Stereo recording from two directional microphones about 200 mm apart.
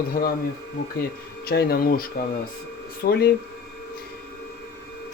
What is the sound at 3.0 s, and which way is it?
Speech, 50° left (ahead or behind).